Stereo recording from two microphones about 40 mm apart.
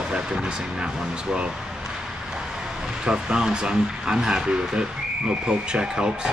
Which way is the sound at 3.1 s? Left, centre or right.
Right.